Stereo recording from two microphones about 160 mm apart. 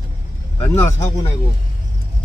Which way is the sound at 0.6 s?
15° left (ahead or behind).